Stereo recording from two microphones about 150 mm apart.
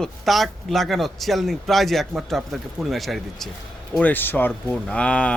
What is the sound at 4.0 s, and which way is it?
Speech, 10° left (ahead or behind).